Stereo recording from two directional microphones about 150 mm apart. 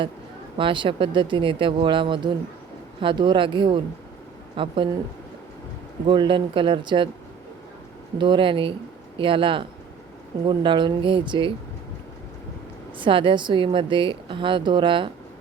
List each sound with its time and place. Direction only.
0.5 s a woman's voice: 35° right (ahead or behind)
6.1 s a woman's voice: 35° right (ahead or behind)
8.2 s a woman's voice: 35° right (ahead or behind)
13.0 s a woman's voice: 35° right (ahead or behind)